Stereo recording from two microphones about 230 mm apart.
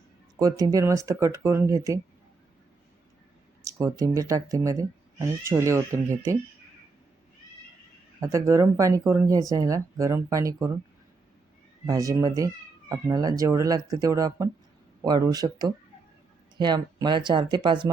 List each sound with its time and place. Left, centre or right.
0.3 s speech: centre
3.6 s speech: centre
8.2 s speech: centre
11.9 s speech: centre